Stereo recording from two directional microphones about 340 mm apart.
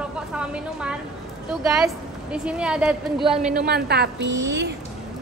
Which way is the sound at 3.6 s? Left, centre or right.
Right.